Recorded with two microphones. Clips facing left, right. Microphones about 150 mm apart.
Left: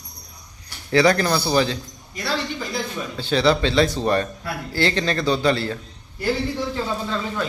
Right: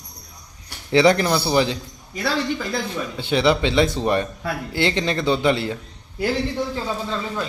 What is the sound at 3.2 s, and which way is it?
Speech, 20° right (ahead or behind).